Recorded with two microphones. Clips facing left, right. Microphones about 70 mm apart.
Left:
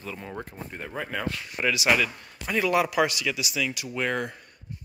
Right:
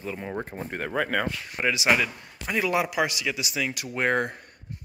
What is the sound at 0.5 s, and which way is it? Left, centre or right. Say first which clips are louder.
Speech: right 6 dB; right.